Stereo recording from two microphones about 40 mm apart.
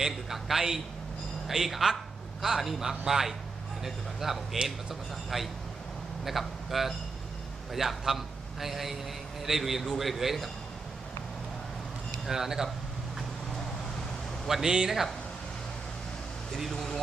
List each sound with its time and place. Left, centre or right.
0.0 s a man's voice: centre
4.5 s a man's voice: centre
5.3 s a man's voice: centre
12.2 s a man's voice: centre
14.4 s a man's voice: centre
16.7 s speech: centre